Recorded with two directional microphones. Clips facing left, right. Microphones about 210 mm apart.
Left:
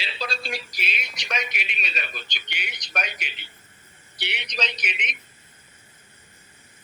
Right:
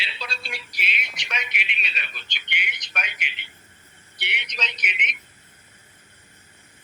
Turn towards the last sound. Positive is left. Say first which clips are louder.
# left 1 dB
turn(degrees=35)  # may be behind; listen again after turning